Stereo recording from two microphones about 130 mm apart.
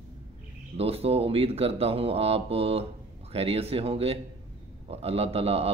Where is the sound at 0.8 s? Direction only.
50° right (ahead or behind).